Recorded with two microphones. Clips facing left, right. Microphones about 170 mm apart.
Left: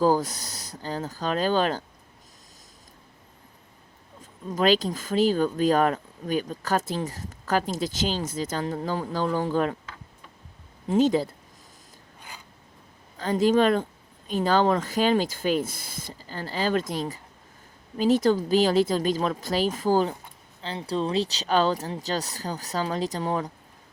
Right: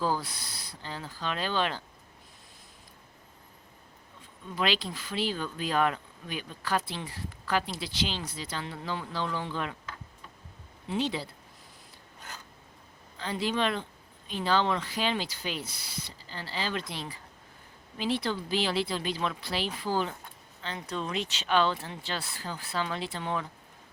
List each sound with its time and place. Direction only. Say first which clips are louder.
0.0 s speech: left 9 dB; 45° left (ahead or behind)
4.2 s speech: left 7 dB; 45° left (ahead or behind)
10.8 s speech: left 10 dB; 45° left (ahead or behind)
13.1 s speech: left 10 dB; 45° left (ahead or behind)